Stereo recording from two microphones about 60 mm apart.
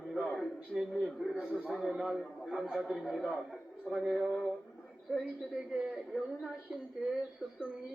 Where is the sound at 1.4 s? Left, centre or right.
Right.